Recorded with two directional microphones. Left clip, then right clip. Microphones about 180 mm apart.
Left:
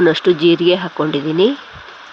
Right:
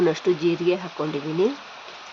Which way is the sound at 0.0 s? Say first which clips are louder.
Left 9 dB; 25° left (ahead or behind).